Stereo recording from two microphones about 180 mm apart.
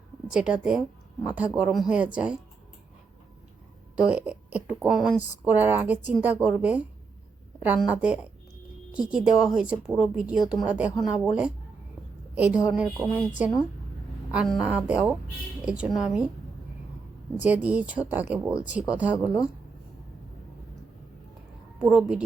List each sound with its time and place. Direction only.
0.3 s speech: 5° right (ahead or behind)
3.9 s speech: 5° right (ahead or behind)
12.3 s a woman's voice: 10° right (ahead or behind)
17.3 s speech: 10° right (ahead or behind)
19.1 s speech: 20° left (ahead or behind)
21.8 s a woman's voice: 5° right (ahead or behind)